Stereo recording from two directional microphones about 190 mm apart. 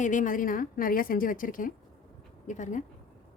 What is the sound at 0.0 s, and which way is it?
A woman's voice, 45° left (ahead or behind).